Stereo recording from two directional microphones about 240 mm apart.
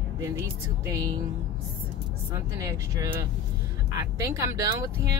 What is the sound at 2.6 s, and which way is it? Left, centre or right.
Speech, centre.